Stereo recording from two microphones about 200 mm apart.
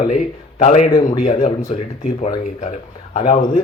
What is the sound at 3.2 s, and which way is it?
Speech, 30° left (ahead or behind).